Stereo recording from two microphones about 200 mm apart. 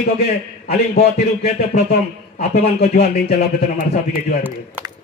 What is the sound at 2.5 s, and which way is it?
Speech, 50° left (ahead or behind).